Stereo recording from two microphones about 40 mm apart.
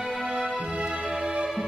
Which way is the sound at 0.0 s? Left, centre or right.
Centre.